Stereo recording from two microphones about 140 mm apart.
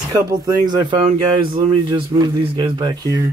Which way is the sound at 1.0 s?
40° right (ahead or behind).